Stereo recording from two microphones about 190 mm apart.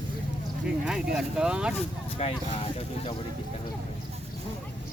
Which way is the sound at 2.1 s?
30° left (ahead or behind).